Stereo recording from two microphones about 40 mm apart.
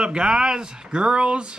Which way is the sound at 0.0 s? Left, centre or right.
Right.